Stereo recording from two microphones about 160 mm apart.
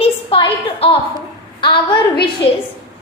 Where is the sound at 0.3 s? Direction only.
35° left (ahead or behind).